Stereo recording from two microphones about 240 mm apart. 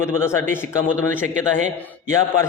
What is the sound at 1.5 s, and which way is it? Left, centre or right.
Speech, right.